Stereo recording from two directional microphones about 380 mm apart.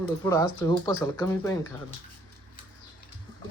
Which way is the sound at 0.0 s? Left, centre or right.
Centre.